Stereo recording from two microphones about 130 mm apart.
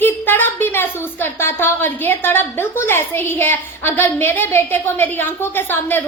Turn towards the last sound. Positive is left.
turn(degrees=15)  # may be behind; listen again after turning